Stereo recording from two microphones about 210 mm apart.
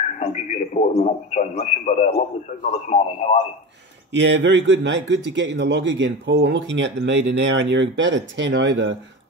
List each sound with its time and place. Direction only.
0.2 s a man's voice: 35° left (ahead or behind)
4.1 s a man's voice: 60° right (ahead or behind)